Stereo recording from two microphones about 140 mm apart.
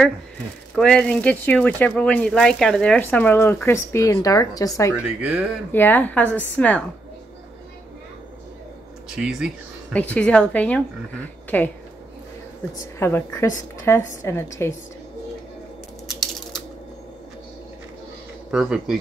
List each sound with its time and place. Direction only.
0.7 s speech: 5° left (ahead or behind); by 4.9 s 25° left (ahead or behind)
4.9 s speech: 5° right (ahead or behind)
5.7 s speech: 15° left (ahead or behind)
9.1 s speech: 5° right (ahead or behind)
9.9 s speech: 10° left (ahead or behind)
13.0 s a woman's voice: 15° left (ahead or behind)
16.1 s typing: centre (ahead or behind)
18.5 s speech: 5° right (ahead or behind)